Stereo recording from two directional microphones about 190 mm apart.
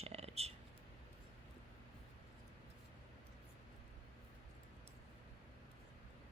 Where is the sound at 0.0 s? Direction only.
35° right (ahead or behind).